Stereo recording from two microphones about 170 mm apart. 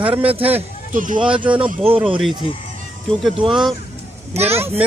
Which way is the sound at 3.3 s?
30° right (ahead or behind).